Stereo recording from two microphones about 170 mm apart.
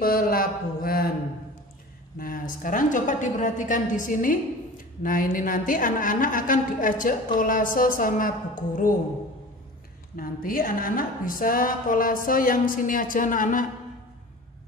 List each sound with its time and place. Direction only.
0.0 s a woman's voice: 60° left (ahead or behind)
2.1 s a woman's voice: 55° left (ahead or behind)
10.1 s a woman's voice: 55° left (ahead or behind)